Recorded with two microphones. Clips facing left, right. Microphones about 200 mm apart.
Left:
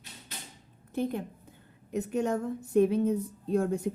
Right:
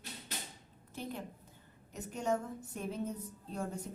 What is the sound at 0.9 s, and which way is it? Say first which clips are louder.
A woman's voice: left 11 dB; 55° left (ahead or behind).